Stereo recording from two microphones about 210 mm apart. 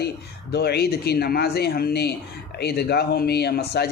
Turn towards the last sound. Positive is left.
turn(degrees=50)  # may be behind; listen again after turning